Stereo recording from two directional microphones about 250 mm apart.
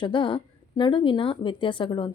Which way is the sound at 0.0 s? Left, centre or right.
Centre.